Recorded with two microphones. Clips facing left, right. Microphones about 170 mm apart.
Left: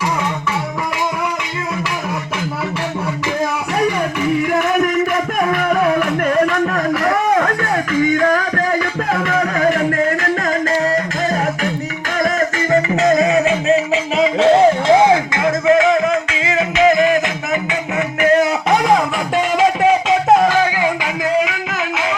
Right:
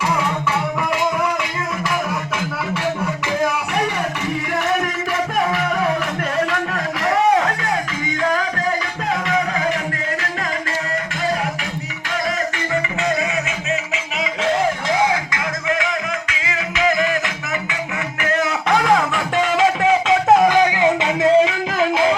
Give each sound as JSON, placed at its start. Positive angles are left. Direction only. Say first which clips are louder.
{"t": 7.3, "sound": "music", "louder": "left 3 dB", "side_deg": 55}
{"t": 12.7, "sound": "music", "louder": "left 8 dB", "side_deg": 40}
{"t": 18.2, "sound": "music", "louder": "left 7 dB", "side_deg": 20}
{"t": 20.5, "sound": "music", "louder": "right 1 dB", "side_deg": -20}